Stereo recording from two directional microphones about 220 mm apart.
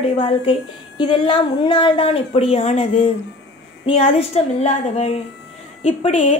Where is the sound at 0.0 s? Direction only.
25° left (ahead or behind).